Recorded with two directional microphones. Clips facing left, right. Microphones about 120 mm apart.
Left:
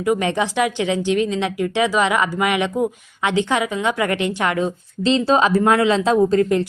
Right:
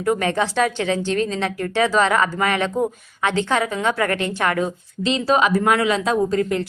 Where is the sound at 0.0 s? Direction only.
15° left (ahead or behind).